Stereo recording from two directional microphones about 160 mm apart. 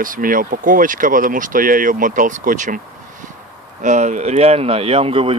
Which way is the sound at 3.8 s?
50° right (ahead or behind).